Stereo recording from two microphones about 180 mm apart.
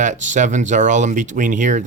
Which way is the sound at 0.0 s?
45° right (ahead or behind).